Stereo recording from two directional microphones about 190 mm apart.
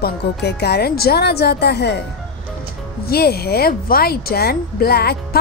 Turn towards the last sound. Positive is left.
turn(degrees=55)  # may be behind; listen again after turning